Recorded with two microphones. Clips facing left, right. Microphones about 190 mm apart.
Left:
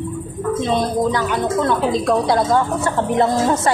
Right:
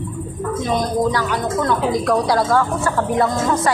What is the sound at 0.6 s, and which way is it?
Speech, 25° left (ahead or behind).